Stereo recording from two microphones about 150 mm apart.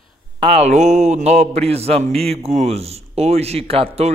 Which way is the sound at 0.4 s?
45° right (ahead or behind).